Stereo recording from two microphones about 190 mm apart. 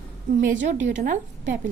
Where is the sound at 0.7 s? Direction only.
40° right (ahead or behind).